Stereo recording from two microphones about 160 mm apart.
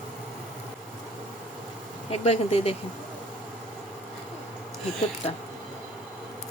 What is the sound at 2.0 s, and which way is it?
Speech, 40° left (ahead or behind).